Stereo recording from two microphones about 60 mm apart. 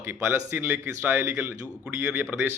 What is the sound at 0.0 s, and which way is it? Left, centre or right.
Speech, right.